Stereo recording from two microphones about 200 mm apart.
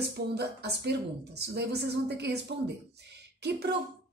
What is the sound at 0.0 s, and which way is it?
A woman's voice, 55° right (ahead or behind).